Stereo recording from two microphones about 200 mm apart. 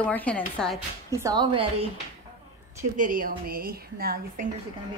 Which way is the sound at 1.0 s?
15° right (ahead or behind).